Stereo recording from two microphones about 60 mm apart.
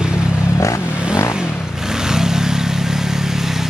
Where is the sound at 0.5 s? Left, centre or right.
Left.